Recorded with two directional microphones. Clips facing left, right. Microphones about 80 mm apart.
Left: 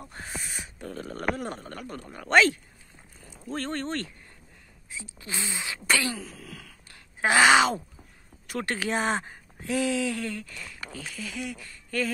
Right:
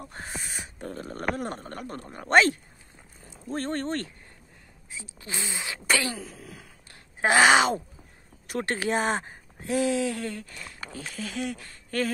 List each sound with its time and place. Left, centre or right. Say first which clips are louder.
0.1 s speech: left 2 dB; right
5.2 s speech: even; right
5.9 s a sound: even; right
8.5 s speech: right 2 dB; right